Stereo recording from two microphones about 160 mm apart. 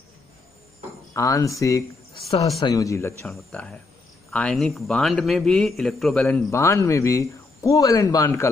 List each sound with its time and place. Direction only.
1.1 s a man's voice: 20° left (ahead or behind)
3.3 s a man's voice: 5° left (ahead or behind)
6.5 s a man's voice: 15° left (ahead or behind)